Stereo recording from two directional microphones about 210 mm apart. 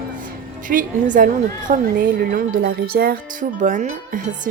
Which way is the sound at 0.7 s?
40° right (ahead or behind).